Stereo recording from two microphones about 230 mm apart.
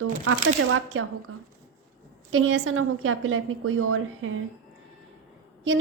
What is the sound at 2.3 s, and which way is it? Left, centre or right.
A woman's voice, right.